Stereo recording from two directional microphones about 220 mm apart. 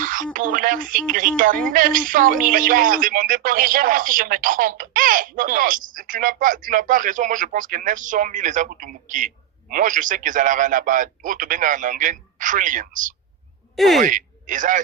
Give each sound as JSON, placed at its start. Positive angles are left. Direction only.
{"t": 0.0, "sound": "a sound", "side_deg": -40}
{"t": 0.3, "sound": "speech", "side_deg": -35}
{"t": 13.7, "sound": "speech", "side_deg": 0}
{"t": 14.0, "sound": "speech", "side_deg": -35}